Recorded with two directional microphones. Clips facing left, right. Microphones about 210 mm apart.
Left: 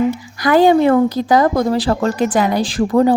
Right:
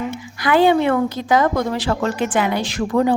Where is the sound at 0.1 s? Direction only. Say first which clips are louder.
Left 4 dB; 40° left (ahead or behind).